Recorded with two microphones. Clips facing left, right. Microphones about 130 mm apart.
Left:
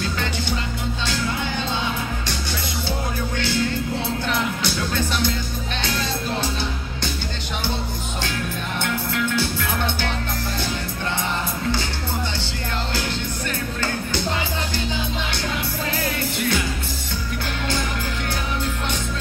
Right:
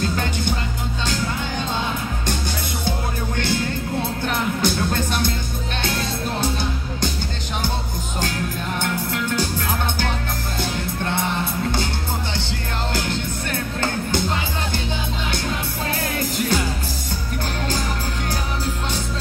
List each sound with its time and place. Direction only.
4.3 s music: 50° right (ahead or behind)
8.8 s music: 45° right (ahead or behind)
13.5 s music: 55° right (ahead or behind)